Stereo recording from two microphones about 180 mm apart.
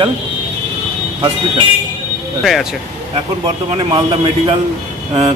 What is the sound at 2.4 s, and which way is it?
Speech, centre (ahead or behind).